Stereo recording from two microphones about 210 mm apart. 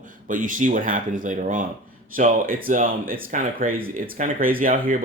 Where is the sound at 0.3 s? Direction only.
40° right (ahead or behind).